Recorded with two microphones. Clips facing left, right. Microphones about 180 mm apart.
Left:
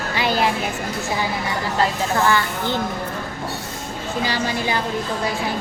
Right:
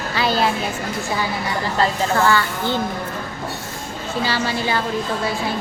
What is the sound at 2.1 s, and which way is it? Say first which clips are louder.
Speech: even; 15° left (ahead or behind).